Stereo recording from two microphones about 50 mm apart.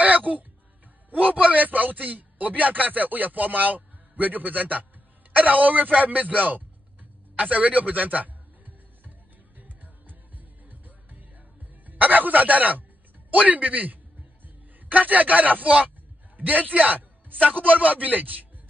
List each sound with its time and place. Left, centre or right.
0.0 s throat clearing: right
1.1 s a man's voice: right
5.3 s a sound: right
10.7 s music: right
11.8 s a man's voice: right